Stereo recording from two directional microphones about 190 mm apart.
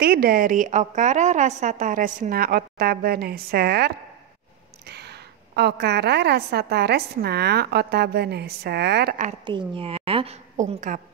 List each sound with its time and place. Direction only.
0.0 s a woman's voice: 50° right (ahead or behind)
4.8 s a sound: 60° right (ahead or behind)
5.6 s a woman's voice: 60° right (ahead or behind)
9.5 s a woman's voice: 25° right (ahead or behind); by 11.0 s 40° right (ahead or behind)